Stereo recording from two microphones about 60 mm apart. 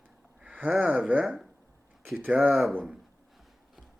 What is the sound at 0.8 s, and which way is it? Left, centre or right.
Speech, right.